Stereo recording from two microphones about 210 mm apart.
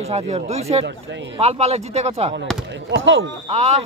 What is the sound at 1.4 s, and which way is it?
Speech, 30° right (ahead or behind).